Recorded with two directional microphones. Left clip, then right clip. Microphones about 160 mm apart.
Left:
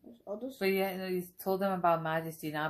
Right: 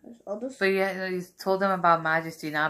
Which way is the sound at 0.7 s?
20° left (ahead or behind).